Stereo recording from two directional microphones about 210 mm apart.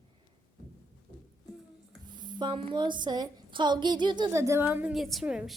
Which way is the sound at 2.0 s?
20° right (ahead or behind).